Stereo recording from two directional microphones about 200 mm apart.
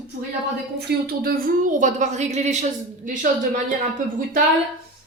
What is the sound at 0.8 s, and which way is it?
Speech, 50° right (ahead or behind).